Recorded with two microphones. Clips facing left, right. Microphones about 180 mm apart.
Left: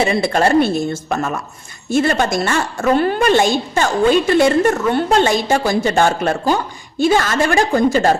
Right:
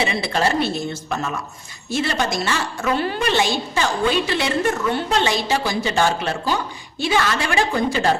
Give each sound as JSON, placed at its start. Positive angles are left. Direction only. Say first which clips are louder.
{"t": 0.0, "sound": "a woman's voice", "louder": "left 6 dB", "side_deg": 50}